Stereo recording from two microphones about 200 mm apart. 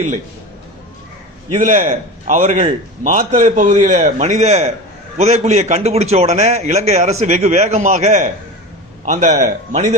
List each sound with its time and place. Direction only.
1.5 s a man's voice: 35° right (ahead or behind)